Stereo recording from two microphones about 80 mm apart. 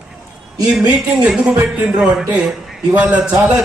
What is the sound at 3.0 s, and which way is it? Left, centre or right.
Speech, centre.